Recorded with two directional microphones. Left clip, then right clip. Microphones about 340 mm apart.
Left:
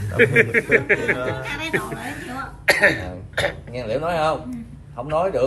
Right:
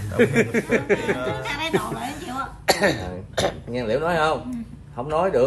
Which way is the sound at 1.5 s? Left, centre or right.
Right.